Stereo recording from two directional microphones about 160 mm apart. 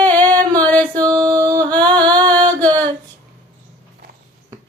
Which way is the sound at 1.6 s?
10° left (ahead or behind).